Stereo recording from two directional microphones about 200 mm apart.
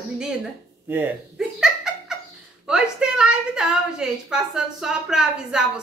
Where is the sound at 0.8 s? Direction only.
10° right (ahead or behind).